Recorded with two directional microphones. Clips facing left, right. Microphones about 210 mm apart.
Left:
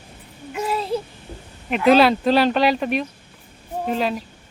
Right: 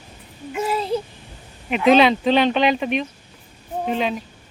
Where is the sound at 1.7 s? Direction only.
Centre (ahead or behind).